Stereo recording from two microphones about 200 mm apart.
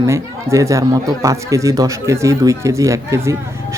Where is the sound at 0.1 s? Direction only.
15° right (ahead or behind).